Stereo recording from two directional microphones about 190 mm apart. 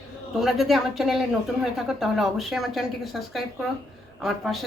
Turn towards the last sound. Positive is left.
turn(degrees=0)  # may be behind; listen again after turning